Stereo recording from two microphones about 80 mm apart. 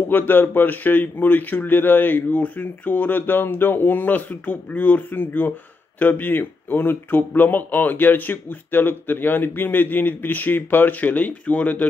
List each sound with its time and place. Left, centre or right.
0.1 s speech: left